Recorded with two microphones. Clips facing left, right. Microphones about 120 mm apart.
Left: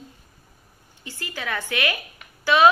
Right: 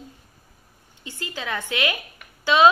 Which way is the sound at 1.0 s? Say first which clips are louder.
Even; 20° right (ahead or behind).